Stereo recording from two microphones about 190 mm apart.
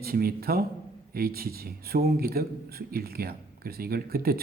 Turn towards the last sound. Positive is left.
turn(degrees=-55)  # may be behind; listen again after turning